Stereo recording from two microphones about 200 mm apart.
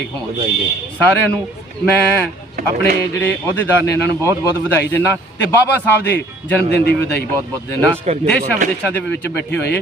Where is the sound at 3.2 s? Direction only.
10° left (ahead or behind).